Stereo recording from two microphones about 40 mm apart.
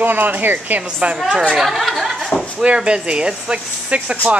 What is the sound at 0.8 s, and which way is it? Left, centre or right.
Speech, right.